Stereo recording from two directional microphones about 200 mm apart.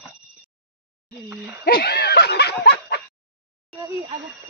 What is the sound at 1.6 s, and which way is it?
Snicker, 50° left (ahead or behind).